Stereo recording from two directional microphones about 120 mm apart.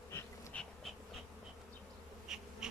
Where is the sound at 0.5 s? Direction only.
10° left (ahead or behind).